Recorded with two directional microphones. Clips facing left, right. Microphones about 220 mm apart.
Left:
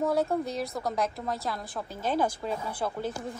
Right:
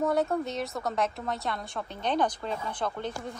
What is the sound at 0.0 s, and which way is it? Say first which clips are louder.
A woman's voice: even; centre (ahead or behind).